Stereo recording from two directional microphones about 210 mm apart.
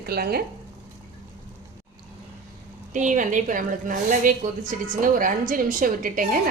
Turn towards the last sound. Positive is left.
turn(degrees=-40)  # may be behind; listen again after turning